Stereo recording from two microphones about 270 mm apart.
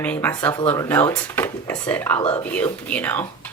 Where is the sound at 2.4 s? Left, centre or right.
Centre.